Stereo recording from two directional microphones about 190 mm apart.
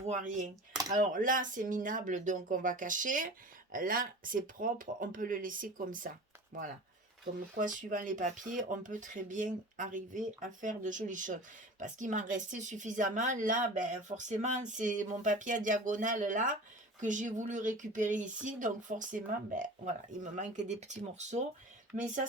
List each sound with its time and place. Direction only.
0.0 s speech: 40° right (ahead or behind)